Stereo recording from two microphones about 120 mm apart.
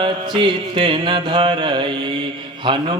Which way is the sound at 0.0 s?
45° right (ahead or behind).